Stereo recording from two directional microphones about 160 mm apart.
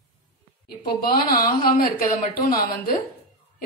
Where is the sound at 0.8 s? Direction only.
65° left (ahead or behind).